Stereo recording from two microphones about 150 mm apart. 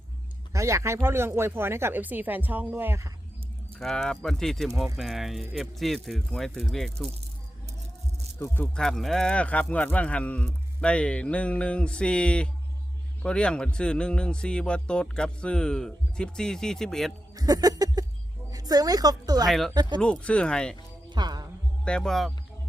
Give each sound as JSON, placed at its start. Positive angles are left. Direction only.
{"t": 0.5, "sound": "speech", "side_deg": -20}
{"t": 3.8, "sound": "a man's voice", "side_deg": 0}
{"t": 8.4, "sound": "speech", "side_deg": 15}
{"t": 8.7, "sound": "a man's voice", "side_deg": 0}
{"t": 17.3, "sound": "a sound", "side_deg": -25}
{"t": 18.5, "sound": "a woman's voice", "side_deg": -25}
{"t": 19.5, "sound": "a man's voice", "side_deg": 0}
{"t": 19.7, "sound": "speech", "side_deg": -30}
{"t": 20.0, "sound": "speech", "side_deg": 5}
{"t": 21.1, "sound": "music", "side_deg": -30}
{"t": 21.8, "sound": "a man's voice", "side_deg": 5}